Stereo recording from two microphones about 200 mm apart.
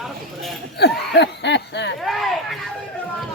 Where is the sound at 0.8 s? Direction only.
55° left (ahead or behind).